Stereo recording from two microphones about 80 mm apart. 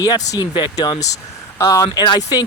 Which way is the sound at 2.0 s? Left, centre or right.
Left.